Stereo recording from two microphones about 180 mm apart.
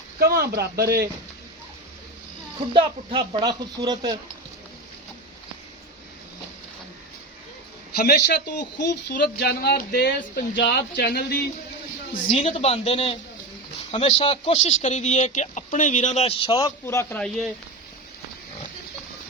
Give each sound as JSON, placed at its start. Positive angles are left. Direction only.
{"t": 0.2, "sound": "a man's voice", "side_deg": -60}
{"t": 2.7, "sound": "speech", "side_deg": -30}
{"t": 7.9, "sound": "a man's voice", "side_deg": 60}
{"t": 12.3, "sound": "speech", "side_deg": 35}
{"t": 14.2, "sound": "speech", "side_deg": 35}
{"t": 16.6, "sound": "a man's voice", "side_deg": 20}
{"t": 17.2, "sound": "speech", "side_deg": 0}